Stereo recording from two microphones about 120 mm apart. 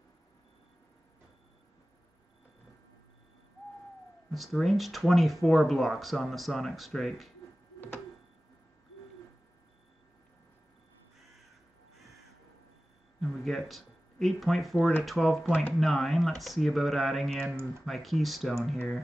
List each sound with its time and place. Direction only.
4.3 s speech: centre (ahead or behind)
13.2 s a sound: centre (ahead or behind)
15.0 s speech: centre (ahead or behind)
17.5 s speech: 20° right (ahead or behind)
17.8 s speech: centre (ahead or behind)